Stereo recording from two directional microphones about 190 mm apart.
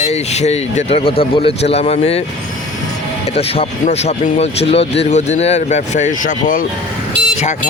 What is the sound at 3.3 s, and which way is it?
Speech, 30° left (ahead or behind).